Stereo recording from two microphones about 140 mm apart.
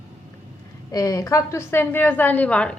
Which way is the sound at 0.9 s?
25° left (ahead or behind).